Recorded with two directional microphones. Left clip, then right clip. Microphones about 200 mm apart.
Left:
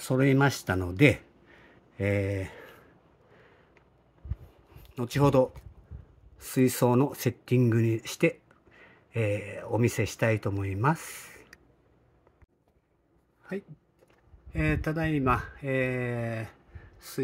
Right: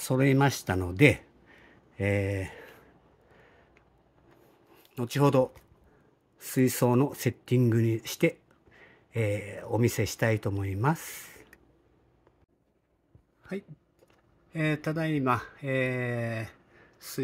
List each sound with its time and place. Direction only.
0.0 s speech: 5° right (ahead or behind)
4.8 s speech: 5° right (ahead or behind)
14.5 s speech: centre (ahead or behind)